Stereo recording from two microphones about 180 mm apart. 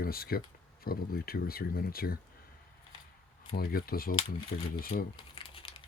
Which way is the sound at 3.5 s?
55° left (ahead or behind).